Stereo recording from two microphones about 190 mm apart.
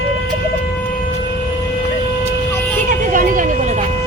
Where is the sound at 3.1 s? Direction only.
45° right (ahead or behind).